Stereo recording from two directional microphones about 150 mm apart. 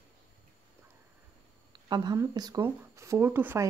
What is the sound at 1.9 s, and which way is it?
Speech, 30° right (ahead or behind).